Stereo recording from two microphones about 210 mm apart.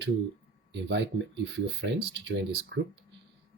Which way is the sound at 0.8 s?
55° right (ahead or behind).